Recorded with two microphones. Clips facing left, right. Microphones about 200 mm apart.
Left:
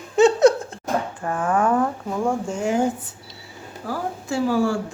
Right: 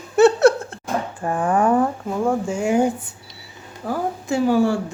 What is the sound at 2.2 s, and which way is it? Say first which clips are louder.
A woman's voice: right 3 dB; 10° right (ahead or behind).